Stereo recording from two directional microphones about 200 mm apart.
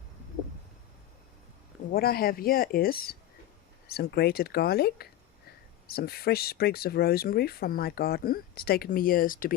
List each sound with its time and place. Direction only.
1.9 s speech: 50° left (ahead or behind)